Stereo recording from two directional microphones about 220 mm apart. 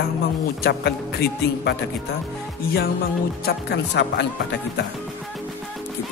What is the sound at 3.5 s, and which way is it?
Speech, 50° left (ahead or behind).